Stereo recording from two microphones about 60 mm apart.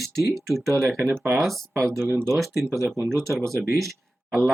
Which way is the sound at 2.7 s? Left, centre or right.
Right.